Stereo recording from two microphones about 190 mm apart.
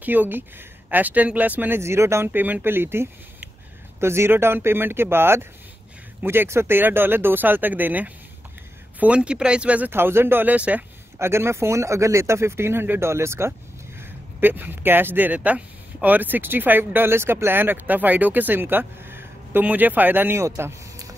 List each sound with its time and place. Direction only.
0.0 s speech: 10° right (ahead or behind)